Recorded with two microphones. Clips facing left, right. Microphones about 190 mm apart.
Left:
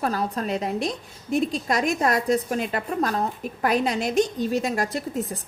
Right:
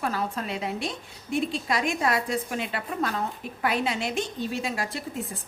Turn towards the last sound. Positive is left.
turn(degrees=40)  # may be behind; listen again after turning